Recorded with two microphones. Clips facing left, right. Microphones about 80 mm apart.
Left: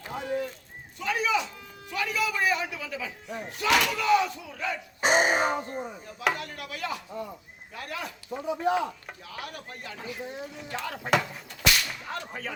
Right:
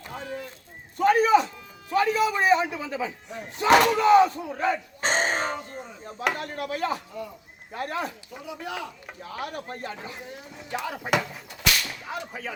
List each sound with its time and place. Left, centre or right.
0.1 s a sound: centre
0.9 s a sound: right
1.9 s a man's voice: right
4.9 s a sound: centre
5.7 s speech: centre
6.3 s speech: right
8.4 s speech: left
9.0 s speech: centre
9.5 s speech: right
10.6 s speech: centre
11.6 s whip: centre